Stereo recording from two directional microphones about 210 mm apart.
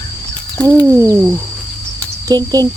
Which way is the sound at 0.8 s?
15° right (ahead or behind).